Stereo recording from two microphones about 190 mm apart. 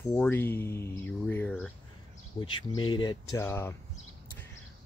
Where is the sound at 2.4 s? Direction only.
25° left (ahead or behind).